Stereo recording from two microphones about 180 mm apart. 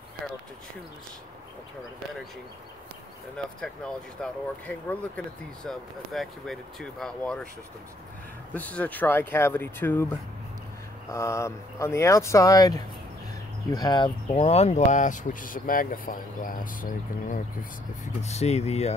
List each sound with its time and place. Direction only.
3.6 s speech: 5° left (ahead or behind)
8.5 s speech: 10° left (ahead or behind)
11.1 s speech: 15° left (ahead or behind); by 17.4 s 50° left (ahead or behind)
18.2 s speech: 35° left (ahead or behind)